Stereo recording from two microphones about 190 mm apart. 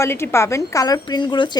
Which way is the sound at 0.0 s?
15° left (ahead or behind).